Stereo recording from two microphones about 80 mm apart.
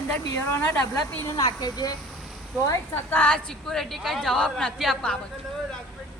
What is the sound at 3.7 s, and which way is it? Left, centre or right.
A woman's voice, centre.